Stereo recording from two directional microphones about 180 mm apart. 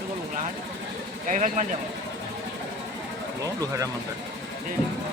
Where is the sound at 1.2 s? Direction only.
45° right (ahead or behind).